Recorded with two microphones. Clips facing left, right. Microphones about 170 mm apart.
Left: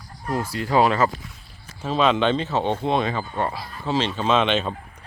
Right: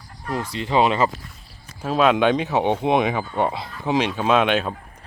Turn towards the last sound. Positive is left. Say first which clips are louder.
# right 2 dB
turn(degrees=-10)  # may be behind; listen again after turning